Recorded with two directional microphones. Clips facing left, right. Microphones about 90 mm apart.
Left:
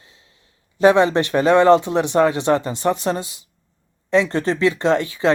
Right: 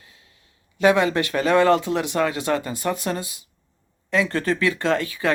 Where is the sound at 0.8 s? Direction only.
30° left (ahead or behind).